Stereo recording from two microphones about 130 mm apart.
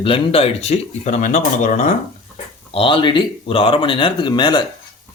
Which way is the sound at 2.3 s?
45° left (ahead or behind).